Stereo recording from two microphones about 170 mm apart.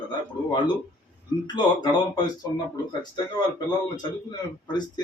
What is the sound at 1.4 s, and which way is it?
Speech, 25° left (ahead or behind).